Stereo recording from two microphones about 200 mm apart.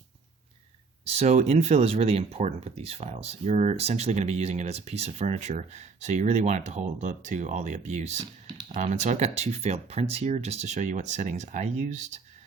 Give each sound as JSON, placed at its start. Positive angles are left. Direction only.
{"t": 1.0, "sound": "speech", "side_deg": -30}